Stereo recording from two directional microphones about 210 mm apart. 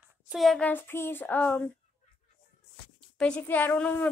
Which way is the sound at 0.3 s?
Centre (ahead or behind).